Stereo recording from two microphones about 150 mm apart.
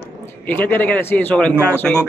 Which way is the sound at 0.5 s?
10° left (ahead or behind).